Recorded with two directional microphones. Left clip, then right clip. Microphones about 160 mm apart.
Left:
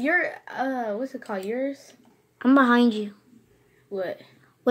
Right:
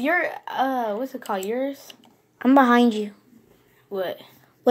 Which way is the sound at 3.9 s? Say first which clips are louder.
Right 2 dB; 20° left (ahead or behind).